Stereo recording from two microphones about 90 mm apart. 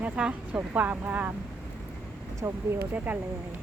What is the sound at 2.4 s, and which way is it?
Speech, 25° right (ahead or behind).